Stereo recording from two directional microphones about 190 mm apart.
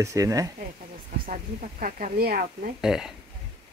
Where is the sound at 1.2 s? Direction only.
45° right (ahead or behind).